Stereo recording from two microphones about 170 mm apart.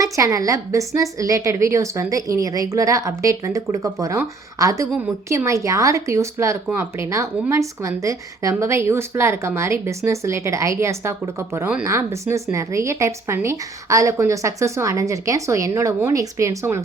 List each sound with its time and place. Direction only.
0.0 s a woman's voice: 20° right (ahead or behind)